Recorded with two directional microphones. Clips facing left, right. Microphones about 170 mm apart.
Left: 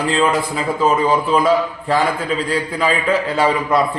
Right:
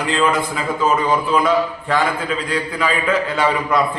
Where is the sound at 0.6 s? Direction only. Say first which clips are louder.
Left 2 dB; 35° left (ahead or behind).